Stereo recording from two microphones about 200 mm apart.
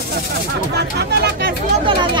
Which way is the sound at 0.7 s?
55° right (ahead or behind).